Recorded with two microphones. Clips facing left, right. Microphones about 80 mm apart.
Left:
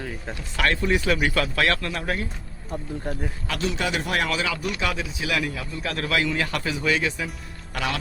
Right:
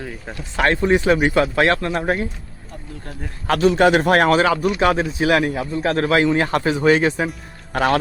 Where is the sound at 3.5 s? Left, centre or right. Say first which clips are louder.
Right 13 dB; right.